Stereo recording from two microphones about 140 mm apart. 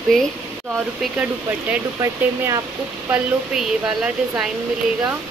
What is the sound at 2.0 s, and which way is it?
Speech, 20° right (ahead or behind).